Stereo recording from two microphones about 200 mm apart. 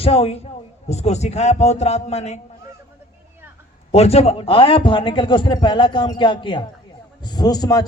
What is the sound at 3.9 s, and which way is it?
A man's voice, 30° left (ahead or behind).